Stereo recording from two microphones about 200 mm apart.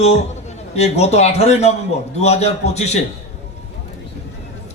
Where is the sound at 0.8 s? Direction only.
35° left (ahead or behind).